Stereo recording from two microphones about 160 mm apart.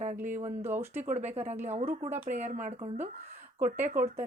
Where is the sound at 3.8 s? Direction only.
55° right (ahead or behind).